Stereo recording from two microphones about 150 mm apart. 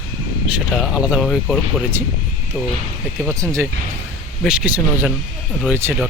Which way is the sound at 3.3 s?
20° right (ahead or behind).